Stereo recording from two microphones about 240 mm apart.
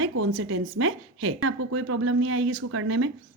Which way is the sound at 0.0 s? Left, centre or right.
Right.